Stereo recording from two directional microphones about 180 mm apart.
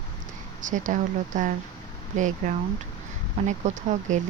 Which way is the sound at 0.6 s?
45° right (ahead or behind).